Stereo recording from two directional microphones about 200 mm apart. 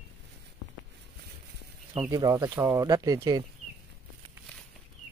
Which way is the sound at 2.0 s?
15° right (ahead or behind).